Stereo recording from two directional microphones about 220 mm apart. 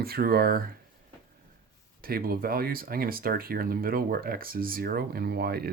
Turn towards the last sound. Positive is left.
turn(degrees=-45)  # may be behind; listen again after turning